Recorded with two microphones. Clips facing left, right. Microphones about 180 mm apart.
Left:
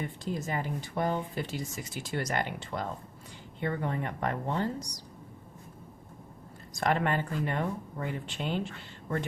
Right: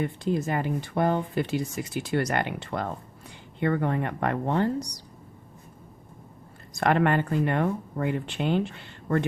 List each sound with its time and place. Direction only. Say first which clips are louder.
0.0 s speech: right 8 dB; 65° right (ahead or behind)
6.7 s speech: right 6 dB; 65° right (ahead or behind)